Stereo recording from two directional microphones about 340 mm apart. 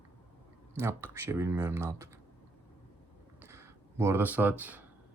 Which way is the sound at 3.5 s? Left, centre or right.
Centre.